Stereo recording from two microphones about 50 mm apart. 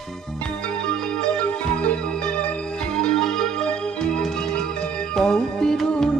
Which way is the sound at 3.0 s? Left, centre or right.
Centre.